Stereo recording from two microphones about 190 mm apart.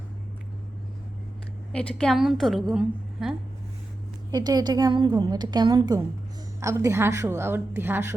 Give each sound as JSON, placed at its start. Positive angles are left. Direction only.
{"t": 1.9, "sound": "a woman's voice", "side_deg": 5}
{"t": 4.3, "sound": "a woman's voice", "side_deg": -20}